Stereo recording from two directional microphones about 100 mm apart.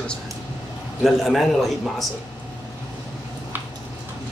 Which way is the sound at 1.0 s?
Centre (ahead or behind).